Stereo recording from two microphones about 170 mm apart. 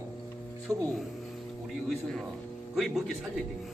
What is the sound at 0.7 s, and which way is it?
Speech, 20° right (ahead or behind).